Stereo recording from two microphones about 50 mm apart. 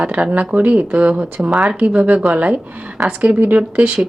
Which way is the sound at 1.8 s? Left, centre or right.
Right.